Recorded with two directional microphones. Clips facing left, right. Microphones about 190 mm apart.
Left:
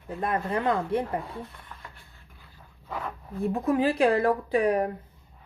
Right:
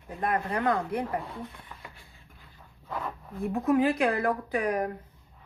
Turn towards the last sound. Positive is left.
turn(degrees=30)  # may be behind; listen again after turning